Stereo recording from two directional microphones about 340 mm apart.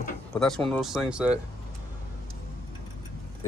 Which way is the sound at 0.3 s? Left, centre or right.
Centre.